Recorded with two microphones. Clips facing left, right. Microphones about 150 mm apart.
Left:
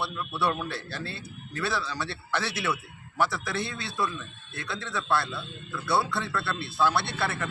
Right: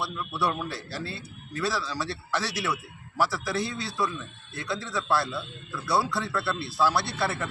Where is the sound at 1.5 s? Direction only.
Centre (ahead or behind).